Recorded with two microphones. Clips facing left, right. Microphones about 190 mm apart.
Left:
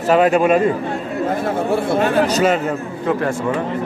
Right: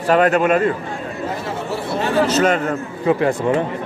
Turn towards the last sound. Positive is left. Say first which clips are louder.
# right 2 dB
turn(degrees=-15)  # may be behind; listen again after turning